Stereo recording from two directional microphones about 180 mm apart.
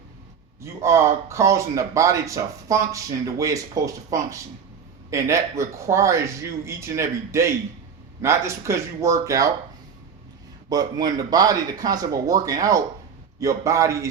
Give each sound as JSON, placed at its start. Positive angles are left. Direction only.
{"t": 0.6, "sound": "speech", "side_deg": -15}
{"t": 10.7, "sound": "speech", "side_deg": -20}